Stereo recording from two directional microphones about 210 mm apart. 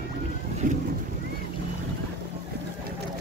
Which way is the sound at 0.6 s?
40° right (ahead or behind).